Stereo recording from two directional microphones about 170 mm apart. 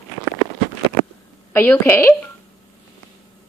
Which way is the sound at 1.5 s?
10° left (ahead or behind).